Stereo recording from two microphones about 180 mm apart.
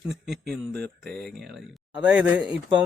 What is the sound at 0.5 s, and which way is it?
Speech, 5° left (ahead or behind).